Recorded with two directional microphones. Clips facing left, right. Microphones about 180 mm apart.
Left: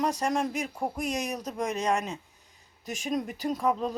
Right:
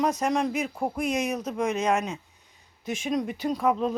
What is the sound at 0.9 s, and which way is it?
Speech, 35° left (ahead or behind).